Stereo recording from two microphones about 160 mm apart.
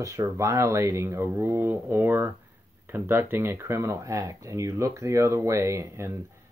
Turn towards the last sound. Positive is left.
turn(degrees=-15)  # may be behind; listen again after turning